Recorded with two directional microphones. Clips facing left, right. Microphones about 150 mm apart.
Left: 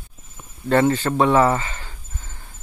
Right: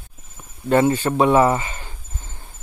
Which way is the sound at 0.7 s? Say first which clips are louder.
Right 1 dB; 15° right (ahead or behind).